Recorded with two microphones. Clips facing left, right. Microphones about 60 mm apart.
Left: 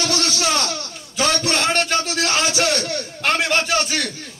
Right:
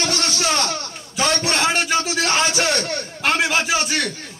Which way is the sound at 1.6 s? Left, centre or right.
Centre.